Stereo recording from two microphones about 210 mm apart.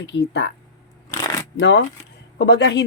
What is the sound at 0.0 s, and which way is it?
Speech, 55° left (ahead or behind).